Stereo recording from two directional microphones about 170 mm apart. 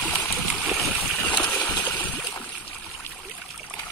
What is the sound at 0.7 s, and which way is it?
Boat, centre (ahead or behind).